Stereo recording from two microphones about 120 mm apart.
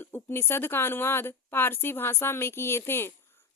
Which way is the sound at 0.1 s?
20° left (ahead or behind).